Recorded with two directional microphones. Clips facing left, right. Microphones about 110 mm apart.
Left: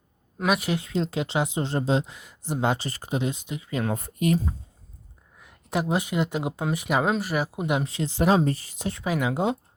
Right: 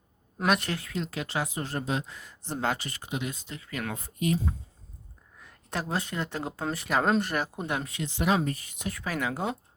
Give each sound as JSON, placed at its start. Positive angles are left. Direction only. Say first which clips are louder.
{"t": 0.3, "sound": "a woman's voice", "louder": "left 2 dB", "side_deg": 5}
{"t": 0.7, "sound": "speech", "louder": "left 6 dB", "side_deg": 20}
{"t": 2.4, "sound": "speech", "louder": "left 4 dB", "side_deg": 15}
{"t": 2.7, "sound": "speech", "louder": "left 6 dB", "side_deg": 35}
{"t": 3.3, "sound": "speech", "louder": "left 7 dB", "side_deg": 15}
{"t": 3.9, "sound": "speech", "louder": "left 3 dB", "side_deg": 60}
{"t": 5.4, "sound": "speech", "louder": "left 7 dB", "side_deg": 10}
{"t": 7.9, "sound": "speech", "louder": "left 5 dB", "side_deg": 35}
{"t": 9.0, "sound": "speech", "louder": "left 6 dB", "side_deg": 15}